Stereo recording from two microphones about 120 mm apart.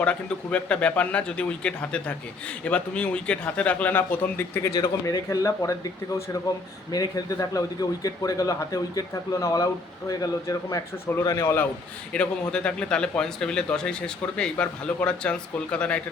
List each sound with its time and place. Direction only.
0.0 s speech: 10° left (ahead or behind)
4.7 s speech: 30° left (ahead or behind)
12.1 s speech: 10° left (ahead or behind)